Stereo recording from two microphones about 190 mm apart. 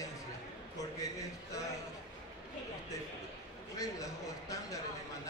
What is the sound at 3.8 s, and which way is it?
A man's voice, 20° left (ahead or behind).